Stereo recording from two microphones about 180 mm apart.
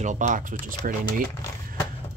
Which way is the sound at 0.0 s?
45° right (ahead or behind).